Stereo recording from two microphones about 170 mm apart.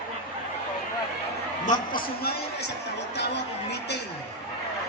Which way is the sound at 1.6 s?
50° left (ahead or behind).